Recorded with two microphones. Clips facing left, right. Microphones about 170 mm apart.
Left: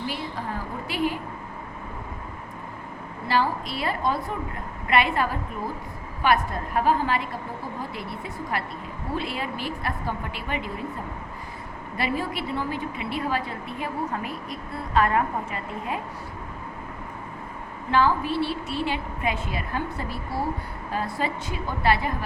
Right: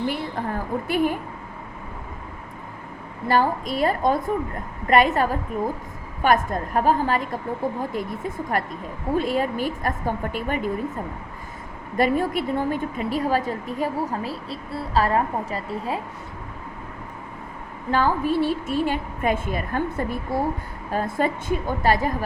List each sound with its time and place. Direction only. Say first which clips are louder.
0.0 s a sound: right 5 dB; 55° right (ahead or behind)
0.9 s a woman's voice: right 4 dB; 50° right (ahead or behind)
3.2 s a woman's voice: right 4 dB; 45° right (ahead or behind)
11.9 s a woman's voice: right 7 dB; 50° right (ahead or behind)
17.9 s a woman's voice: right 1 dB; 45° right (ahead or behind)